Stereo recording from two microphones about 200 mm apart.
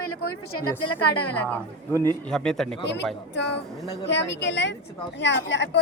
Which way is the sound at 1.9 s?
20° right (ahead or behind).